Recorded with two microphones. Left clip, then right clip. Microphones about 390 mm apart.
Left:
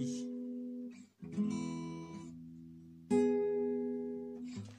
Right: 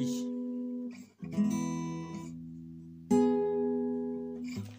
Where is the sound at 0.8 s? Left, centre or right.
Left.